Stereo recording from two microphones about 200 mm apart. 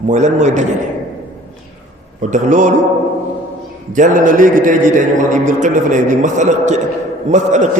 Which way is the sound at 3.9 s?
40° right (ahead or behind).